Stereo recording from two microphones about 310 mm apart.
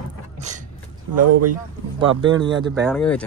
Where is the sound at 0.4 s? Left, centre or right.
Right.